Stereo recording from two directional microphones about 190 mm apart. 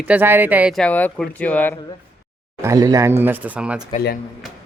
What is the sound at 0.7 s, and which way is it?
Speech, 5° left (ahead or behind).